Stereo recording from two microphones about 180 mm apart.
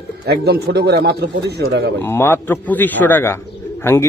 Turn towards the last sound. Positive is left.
turn(degrees=15)  # may be behind; listen again after turning